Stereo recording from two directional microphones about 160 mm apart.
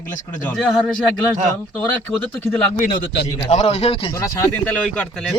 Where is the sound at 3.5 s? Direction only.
45° left (ahead or behind).